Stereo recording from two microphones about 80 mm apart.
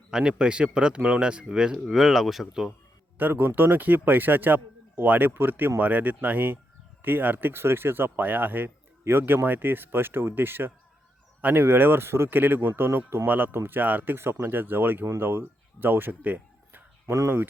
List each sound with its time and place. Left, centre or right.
0.1 s speech: centre
3.2 s speech: right
17.1 s speech: right